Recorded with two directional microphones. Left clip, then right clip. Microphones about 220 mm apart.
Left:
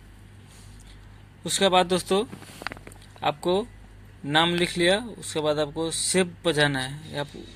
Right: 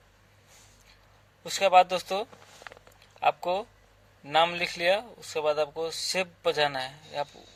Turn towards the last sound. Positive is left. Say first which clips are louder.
# left 2 dB
turn(degrees=-20)  # may be behind; listen again after turning